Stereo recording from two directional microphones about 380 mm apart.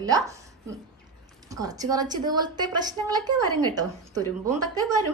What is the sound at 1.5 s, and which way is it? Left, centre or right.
A woman's voice, centre.